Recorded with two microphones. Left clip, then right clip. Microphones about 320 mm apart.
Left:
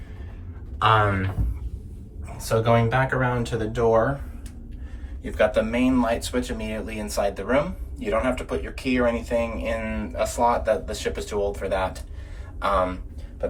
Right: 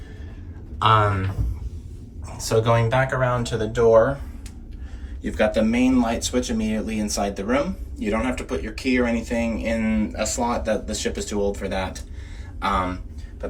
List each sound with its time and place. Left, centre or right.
0.8 s speech: centre
2.4 s speech: centre
5.2 s speech: centre
12.5 s a sound: centre